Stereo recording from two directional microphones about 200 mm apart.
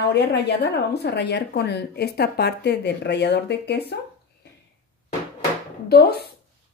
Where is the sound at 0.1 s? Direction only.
55° left (ahead or behind).